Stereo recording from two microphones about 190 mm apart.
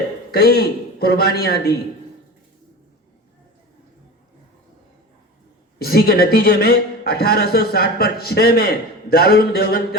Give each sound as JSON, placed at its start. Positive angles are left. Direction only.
{"t": 0.3, "sound": "a man's voice", "side_deg": 55}
{"t": 5.8, "sound": "a man's voice", "side_deg": 50}